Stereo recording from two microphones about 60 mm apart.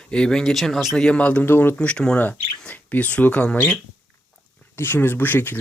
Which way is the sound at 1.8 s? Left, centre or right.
Centre.